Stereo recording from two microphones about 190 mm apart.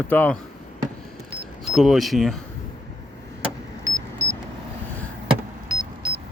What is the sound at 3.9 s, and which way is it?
Vehicle, 15° right (ahead or behind).